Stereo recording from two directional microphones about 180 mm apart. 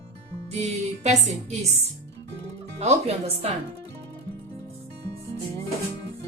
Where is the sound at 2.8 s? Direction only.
35° right (ahead or behind).